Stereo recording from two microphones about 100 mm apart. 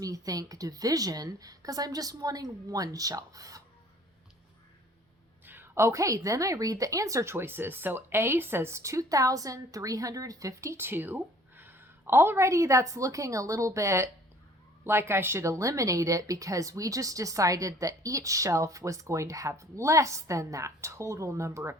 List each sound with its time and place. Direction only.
0.0 s a woman's voice: 35° right (ahead or behind)
5.5 s a woman's voice: 25° right (ahead or behind)